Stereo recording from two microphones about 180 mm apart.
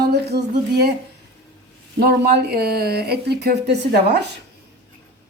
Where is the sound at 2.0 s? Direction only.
60° right (ahead or behind).